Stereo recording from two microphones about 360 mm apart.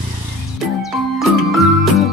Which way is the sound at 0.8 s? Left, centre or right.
Centre.